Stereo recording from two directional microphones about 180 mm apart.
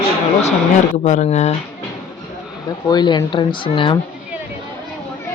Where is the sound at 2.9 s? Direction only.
25° left (ahead or behind).